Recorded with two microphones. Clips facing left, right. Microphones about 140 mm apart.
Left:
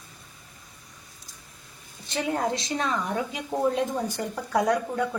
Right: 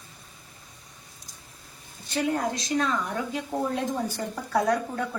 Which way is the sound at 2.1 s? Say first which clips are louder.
Even; 25° left (ahead or behind).